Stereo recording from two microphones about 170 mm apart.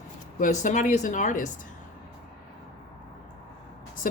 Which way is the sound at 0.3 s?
50° left (ahead or behind).